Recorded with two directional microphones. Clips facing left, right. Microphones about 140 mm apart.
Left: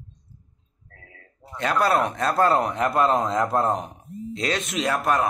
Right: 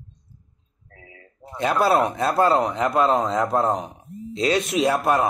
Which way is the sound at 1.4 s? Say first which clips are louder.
Right 2 dB; 15° right (ahead or behind).